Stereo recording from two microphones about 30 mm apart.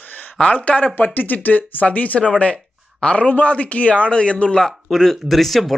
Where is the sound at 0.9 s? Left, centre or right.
Left.